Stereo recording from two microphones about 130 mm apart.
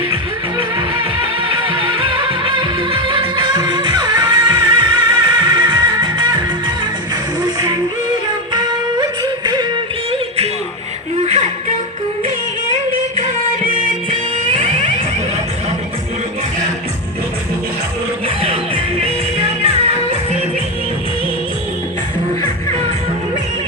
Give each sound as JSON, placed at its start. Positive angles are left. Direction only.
{"t": 1.5, "sound": "music", "side_deg": -40}
{"t": 9.0, "sound": "music", "side_deg": -35}
{"t": 10.1, "sound": "music", "side_deg": -50}
{"t": 11.2, "sound": "a sound", "side_deg": -60}
{"t": 14.1, "sound": "music", "side_deg": -45}
{"t": 18.9, "sound": "music", "side_deg": -50}